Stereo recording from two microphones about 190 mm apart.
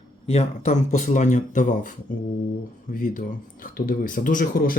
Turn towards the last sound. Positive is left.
turn(degrees=50)  # may be behind; listen again after turning